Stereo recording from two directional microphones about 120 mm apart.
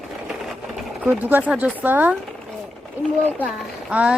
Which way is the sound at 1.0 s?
15° right (ahead or behind).